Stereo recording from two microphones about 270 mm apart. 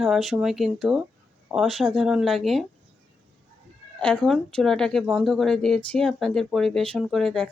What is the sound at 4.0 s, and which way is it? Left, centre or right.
Speech, centre.